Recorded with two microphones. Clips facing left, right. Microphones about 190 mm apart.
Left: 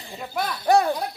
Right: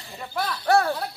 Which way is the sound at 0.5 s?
20° left (ahead or behind).